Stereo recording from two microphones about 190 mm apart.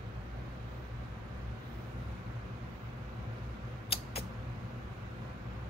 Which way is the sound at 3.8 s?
30° left (ahead or behind).